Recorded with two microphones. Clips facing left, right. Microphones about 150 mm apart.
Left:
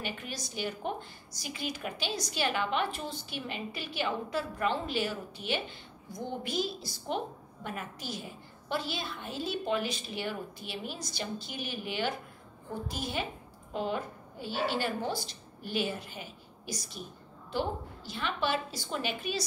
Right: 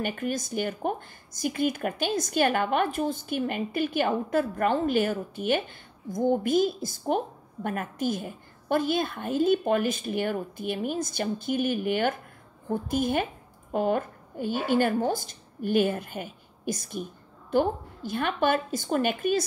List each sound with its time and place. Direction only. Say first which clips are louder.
0.0 s a woman's voice: right 10 dB; 50° right (ahead or behind)